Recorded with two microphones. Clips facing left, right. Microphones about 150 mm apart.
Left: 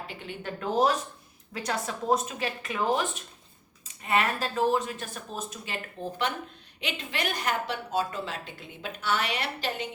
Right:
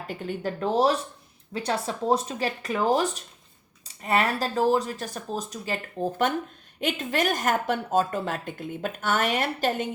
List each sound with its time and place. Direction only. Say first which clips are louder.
0.1 s a woman's voice: right 7 dB; 45° right (ahead or behind)